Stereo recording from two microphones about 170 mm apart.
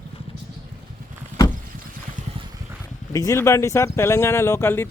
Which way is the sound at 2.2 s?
45° right (ahead or behind).